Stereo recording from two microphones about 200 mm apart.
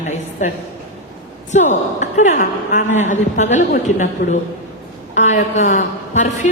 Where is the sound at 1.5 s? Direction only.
35° left (ahead or behind).